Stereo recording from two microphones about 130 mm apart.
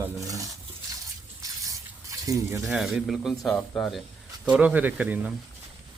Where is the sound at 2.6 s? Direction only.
Centre (ahead or behind).